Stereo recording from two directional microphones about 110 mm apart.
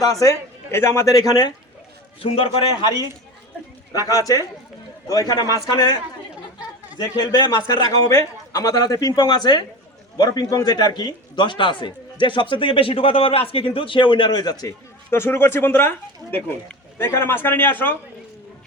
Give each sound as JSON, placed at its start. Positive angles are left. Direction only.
{"t": 0.0, "sound": "speech", "side_deg": 30}
{"t": 2.2, "sound": "a man's voice", "side_deg": 60}
{"t": 3.9, "sound": "a man's voice", "side_deg": 35}
{"t": 14.6, "sound": "a man's voice", "side_deg": 25}